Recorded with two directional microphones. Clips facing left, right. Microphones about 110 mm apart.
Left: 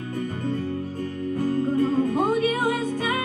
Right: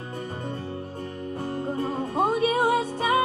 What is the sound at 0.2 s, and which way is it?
Music, 25° right (ahead or behind).